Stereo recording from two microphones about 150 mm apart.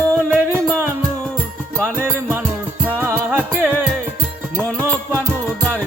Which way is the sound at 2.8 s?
15° right (ahead or behind).